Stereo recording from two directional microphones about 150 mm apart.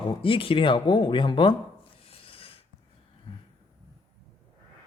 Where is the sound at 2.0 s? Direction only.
40° left (ahead or behind).